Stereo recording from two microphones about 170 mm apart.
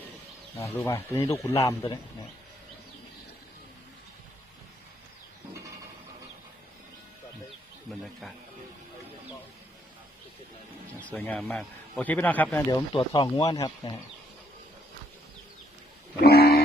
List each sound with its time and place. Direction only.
0.5 s a man's voice: 15° left (ahead or behind)
7.9 s speech: centre (ahead or behind)
11.1 s a man's voice: 10° left (ahead or behind)
13.0 s speech: 20° left (ahead or behind)
16.2 s a sound: 65° left (ahead or behind)